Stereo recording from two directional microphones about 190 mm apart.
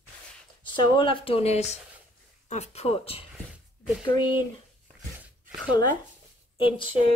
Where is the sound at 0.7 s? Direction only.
25° left (ahead or behind).